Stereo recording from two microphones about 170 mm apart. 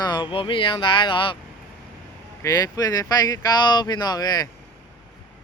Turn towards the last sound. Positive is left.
turn(degrees=25)  # may be behind; listen again after turning